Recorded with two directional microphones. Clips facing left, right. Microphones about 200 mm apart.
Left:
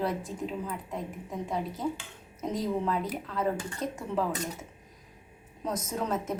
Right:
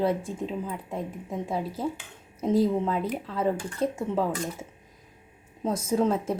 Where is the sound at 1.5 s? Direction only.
30° right (ahead or behind).